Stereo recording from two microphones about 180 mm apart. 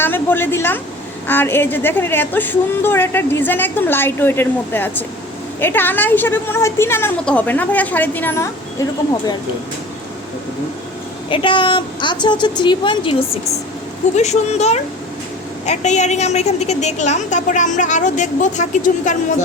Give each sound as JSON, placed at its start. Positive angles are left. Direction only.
{"t": 0.0, "sound": "a woman's voice", "side_deg": 10}
{"t": 11.3, "sound": "a woman's voice", "side_deg": 25}